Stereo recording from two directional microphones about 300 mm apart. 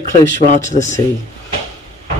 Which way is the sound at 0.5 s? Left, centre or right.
Left.